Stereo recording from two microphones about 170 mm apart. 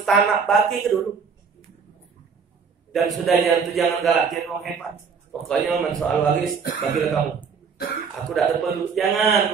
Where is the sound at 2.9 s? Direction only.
Centre (ahead or behind).